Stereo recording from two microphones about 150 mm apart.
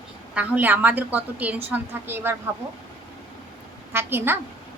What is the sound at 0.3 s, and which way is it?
A woman's voice, 10° right (ahead or behind).